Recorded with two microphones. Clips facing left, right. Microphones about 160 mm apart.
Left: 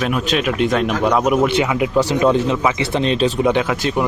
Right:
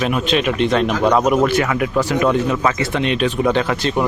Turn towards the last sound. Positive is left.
turn(degrees=10)  # may be behind; listen again after turning